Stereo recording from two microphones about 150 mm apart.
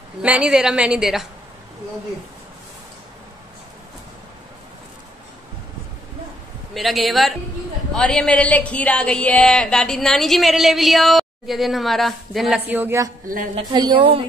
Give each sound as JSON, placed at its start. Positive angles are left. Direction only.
{"t": 0.2, "sound": "speech", "side_deg": -5}
{"t": 6.7, "sound": "speech", "side_deg": 0}
{"t": 13.7, "sound": "a woman's voice", "side_deg": -30}